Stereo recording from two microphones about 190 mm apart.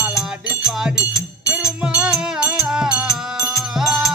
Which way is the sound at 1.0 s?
15° left (ahead or behind).